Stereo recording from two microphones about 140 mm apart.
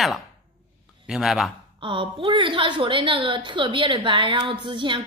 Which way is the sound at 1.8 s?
35° right (ahead or behind).